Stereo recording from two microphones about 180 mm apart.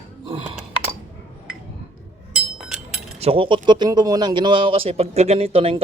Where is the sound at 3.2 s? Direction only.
30° right (ahead or behind).